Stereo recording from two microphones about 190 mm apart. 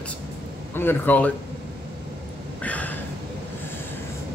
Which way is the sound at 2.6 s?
10° left (ahead or behind).